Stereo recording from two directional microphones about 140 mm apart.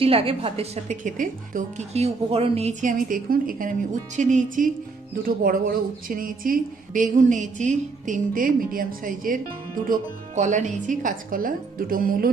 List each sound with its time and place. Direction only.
0.0 s a woman's voice: 45° right (ahead or behind)
1.0 s speech: 70° right (ahead or behind)
1.9 s a woman's voice: 50° right (ahead or behind)
2.8 s speech: 85° right
5.2 s speech: 90° right
9.8 s speech: 70° right (ahead or behind); by 12.3 s 90° right